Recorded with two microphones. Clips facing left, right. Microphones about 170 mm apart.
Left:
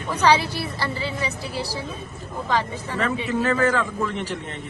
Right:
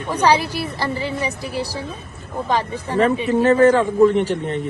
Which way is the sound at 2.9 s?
35° right (ahead or behind).